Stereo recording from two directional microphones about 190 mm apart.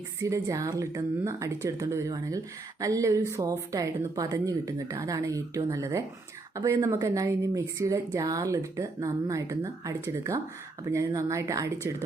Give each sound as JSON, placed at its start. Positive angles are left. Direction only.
{"t": 0.2, "sound": "speech", "side_deg": -15}